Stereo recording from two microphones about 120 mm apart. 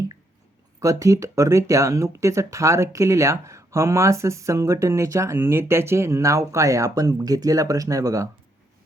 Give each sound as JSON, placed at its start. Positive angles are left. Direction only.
{"t": 0.8, "sound": "speech", "side_deg": -25}